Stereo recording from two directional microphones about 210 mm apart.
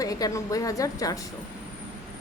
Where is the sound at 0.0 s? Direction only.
15° left (ahead or behind).